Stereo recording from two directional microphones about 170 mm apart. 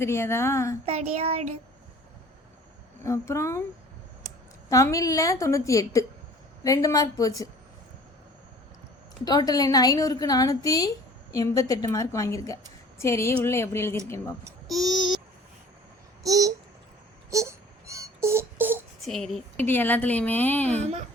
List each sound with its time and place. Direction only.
0.0 s a woman's voice: 15° left (ahead or behind)
0.9 s a child's voice: 35° right (ahead or behind)
3.0 s a woman's voice: 15° left (ahead or behind)
4.7 s a woman's voice: 20° left (ahead or behind)
9.2 s a woman's voice: 25° left (ahead or behind)
14.7 s a child's voice: centre (ahead or behind)
16.2 s speech: 20° right (ahead or behind)
17.3 s a sound: 15° right (ahead or behind)
19.0 s a woman's voice: centre (ahead or behind)